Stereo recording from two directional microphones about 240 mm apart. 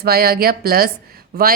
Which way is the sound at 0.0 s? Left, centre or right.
Right.